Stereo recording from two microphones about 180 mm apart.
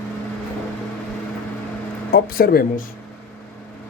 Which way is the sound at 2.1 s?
55° left (ahead or behind).